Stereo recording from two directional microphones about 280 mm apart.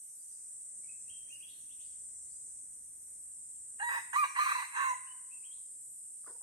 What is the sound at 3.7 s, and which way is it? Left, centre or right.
Chicken, centre.